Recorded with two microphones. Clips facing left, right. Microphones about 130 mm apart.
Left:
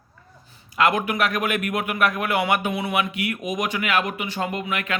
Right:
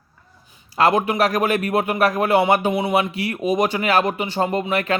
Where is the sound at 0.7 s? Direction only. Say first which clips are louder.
Right 4 dB; 30° right (ahead or behind).